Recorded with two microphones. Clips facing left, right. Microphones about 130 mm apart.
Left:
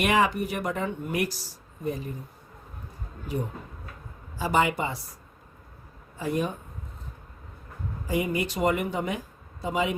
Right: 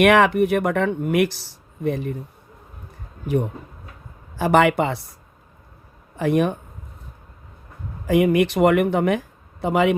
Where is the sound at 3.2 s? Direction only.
65° right (ahead or behind).